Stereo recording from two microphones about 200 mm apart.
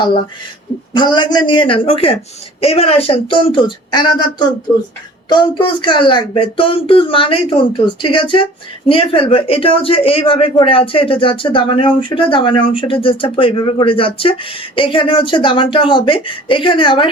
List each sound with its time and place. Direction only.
0.9 s speech: 20° left (ahead or behind)